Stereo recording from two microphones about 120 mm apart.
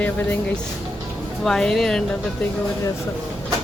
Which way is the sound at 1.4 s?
5° left (ahead or behind).